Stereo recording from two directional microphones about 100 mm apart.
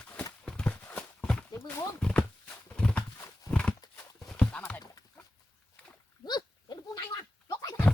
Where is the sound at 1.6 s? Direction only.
10° left (ahead or behind).